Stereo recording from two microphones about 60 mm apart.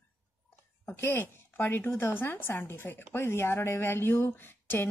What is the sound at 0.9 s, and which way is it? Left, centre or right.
Speech, left.